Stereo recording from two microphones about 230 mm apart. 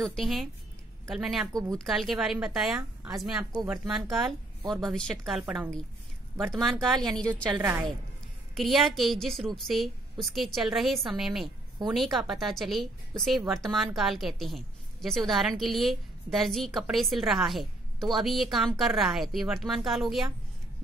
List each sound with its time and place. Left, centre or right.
0.0 s a woman's voice: centre
6.5 s a woman's voice: centre
7.5 s a woman's voice: centre
8.5 s a woman's voice: centre